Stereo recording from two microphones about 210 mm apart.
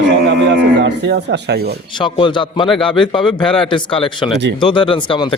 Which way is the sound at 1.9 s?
20° left (ahead or behind).